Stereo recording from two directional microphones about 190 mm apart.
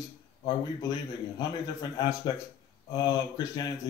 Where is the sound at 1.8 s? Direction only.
20° left (ahead or behind).